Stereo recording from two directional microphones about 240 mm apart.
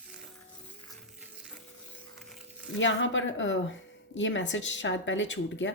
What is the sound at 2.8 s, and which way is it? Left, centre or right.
Speech, left.